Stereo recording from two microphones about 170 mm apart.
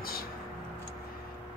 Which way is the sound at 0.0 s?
60° left (ahead or behind).